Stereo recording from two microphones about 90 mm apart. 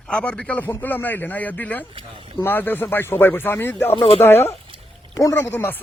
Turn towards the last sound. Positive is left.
turn(degrees=25)  # may be behind; listen again after turning